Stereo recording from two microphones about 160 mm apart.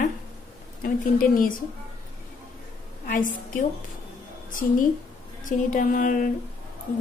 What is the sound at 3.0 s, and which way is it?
Speech, 55° left (ahead or behind).